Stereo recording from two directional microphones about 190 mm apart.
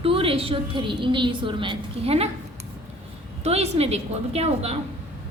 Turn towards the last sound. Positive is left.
turn(degrees=-35)  # may be behind; listen again after turning